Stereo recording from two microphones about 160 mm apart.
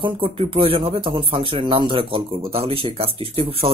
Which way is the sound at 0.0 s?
35° right (ahead or behind).